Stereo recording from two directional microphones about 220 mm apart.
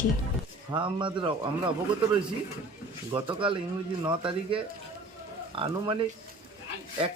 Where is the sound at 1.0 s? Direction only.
20° right (ahead or behind).